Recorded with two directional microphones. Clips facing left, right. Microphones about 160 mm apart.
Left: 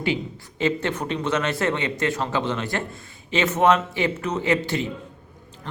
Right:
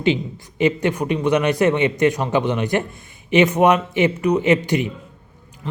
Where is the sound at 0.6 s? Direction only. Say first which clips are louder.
Right 5 dB; 15° right (ahead or behind).